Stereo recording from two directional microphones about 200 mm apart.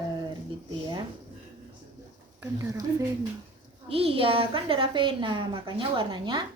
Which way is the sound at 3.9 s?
30° right (ahead or behind).